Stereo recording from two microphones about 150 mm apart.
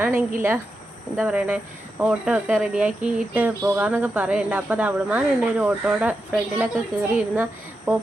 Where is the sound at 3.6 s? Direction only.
20° right (ahead or behind).